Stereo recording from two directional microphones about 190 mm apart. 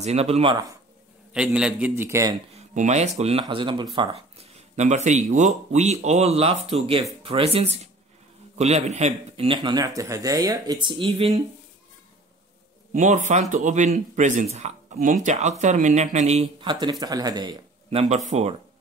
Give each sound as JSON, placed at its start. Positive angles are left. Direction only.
{"t": 0.0, "sound": "speech", "side_deg": -35}
{"t": 1.3, "sound": "a man's voice", "side_deg": -5}
{"t": 2.5, "sound": "speech", "side_deg": -40}
{"t": 12.9, "sound": "speech", "side_deg": -40}
{"t": 17.0, "sound": "speech", "side_deg": -20}